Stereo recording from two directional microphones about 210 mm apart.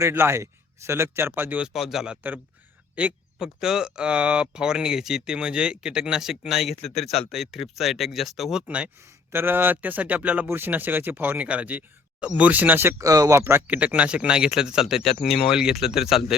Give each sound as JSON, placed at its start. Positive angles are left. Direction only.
{"t": 0.0, "sound": "speech", "side_deg": -10}